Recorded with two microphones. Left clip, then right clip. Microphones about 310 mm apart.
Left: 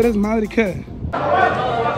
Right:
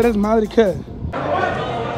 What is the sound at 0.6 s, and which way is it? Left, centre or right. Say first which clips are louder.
Speech: right 4 dB; left.